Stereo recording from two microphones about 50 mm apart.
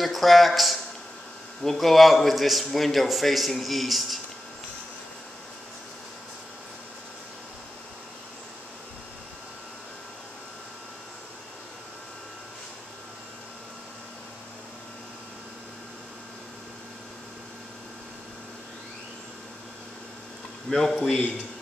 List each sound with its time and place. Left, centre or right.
0.0 s a man's voice: centre
20.7 s a man's voice: centre